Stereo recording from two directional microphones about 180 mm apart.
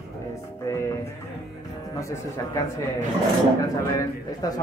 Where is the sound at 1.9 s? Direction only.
15° left (ahead or behind).